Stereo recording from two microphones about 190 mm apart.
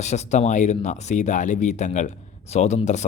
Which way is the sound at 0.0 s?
35° left (ahead or behind).